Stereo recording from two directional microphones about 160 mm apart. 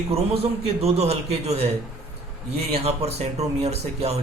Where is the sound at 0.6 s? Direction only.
40° right (ahead or behind).